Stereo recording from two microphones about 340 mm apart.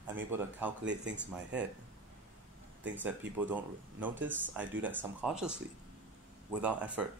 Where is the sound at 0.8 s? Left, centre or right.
Right.